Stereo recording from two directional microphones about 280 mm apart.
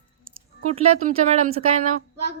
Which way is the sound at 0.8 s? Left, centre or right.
Right.